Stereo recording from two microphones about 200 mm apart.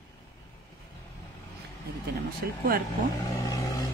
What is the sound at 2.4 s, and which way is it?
Speech, 50° right (ahead or behind).